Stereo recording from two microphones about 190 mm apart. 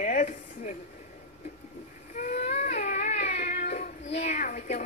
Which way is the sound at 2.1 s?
40° left (ahead or behind).